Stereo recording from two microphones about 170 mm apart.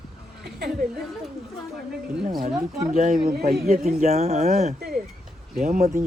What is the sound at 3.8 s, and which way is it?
Speech, 40° right (ahead or behind).